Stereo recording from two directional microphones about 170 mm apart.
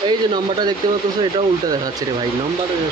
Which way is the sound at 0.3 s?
25° right (ahead or behind).